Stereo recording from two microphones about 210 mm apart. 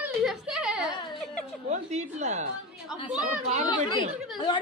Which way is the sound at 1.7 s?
30° right (ahead or behind).